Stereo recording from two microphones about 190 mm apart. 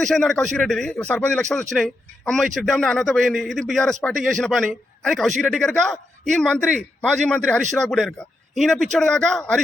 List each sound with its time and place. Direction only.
0.0 s speech: 5° left (ahead or behind)